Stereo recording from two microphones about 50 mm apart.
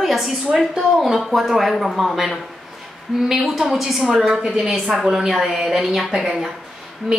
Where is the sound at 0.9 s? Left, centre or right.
Centre.